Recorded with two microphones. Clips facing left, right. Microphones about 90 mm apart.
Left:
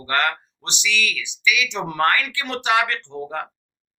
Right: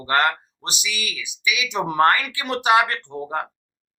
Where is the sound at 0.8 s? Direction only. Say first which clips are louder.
Left 8 dB; 15° right (ahead or behind).